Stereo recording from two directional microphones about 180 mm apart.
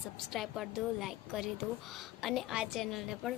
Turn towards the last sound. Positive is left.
turn(degrees=0)  # may be behind; listen again after turning